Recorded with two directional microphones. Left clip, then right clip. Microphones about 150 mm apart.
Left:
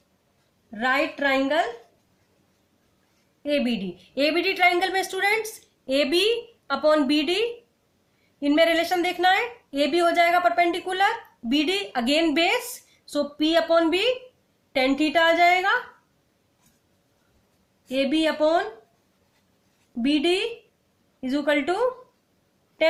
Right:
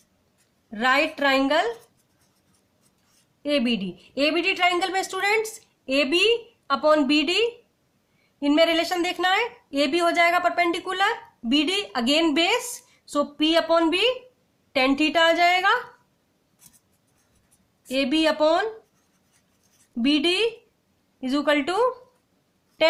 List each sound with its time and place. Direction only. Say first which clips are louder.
0.7 s a woman's voice: right 2 dB; 40° right (ahead or behind)
3.4 s a woman's voice: right 1 dB; 35° right (ahead or behind)
17.8 s a woman's voice: right 1 dB; 40° right (ahead or behind)
20.0 s a woman's voice: right 1 dB; 40° right (ahead or behind)